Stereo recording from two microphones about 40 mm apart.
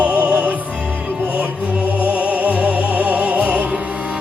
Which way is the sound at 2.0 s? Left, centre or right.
Right.